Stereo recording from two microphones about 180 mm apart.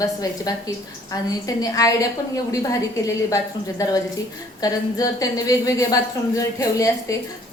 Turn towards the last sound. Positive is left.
turn(degrees=20)  # may be behind; listen again after turning